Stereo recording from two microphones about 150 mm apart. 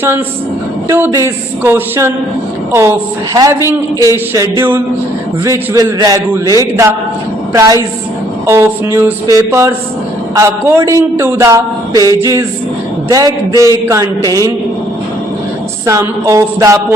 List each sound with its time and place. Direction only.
0.9 s a man's voice: 15° right (ahead or behind)
3.7 s a man's voice: 20° right (ahead or behind)
15.9 s a man's voice: 20° right (ahead or behind)